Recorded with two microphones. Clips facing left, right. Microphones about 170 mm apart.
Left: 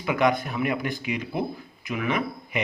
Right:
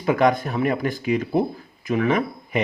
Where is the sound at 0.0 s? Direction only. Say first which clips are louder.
Right 4 dB; 40° right (ahead or behind).